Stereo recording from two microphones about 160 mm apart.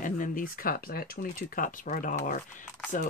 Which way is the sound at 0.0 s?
55° left (ahead or behind).